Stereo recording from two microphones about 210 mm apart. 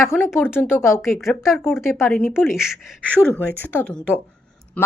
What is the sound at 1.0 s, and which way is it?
Speech, centre (ahead or behind).